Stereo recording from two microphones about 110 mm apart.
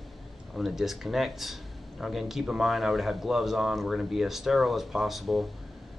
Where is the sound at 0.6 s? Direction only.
Centre (ahead or behind).